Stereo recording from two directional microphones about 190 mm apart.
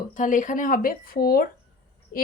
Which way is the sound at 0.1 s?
45° left (ahead or behind).